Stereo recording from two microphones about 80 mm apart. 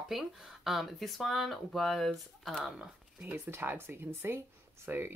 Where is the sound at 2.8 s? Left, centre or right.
Right.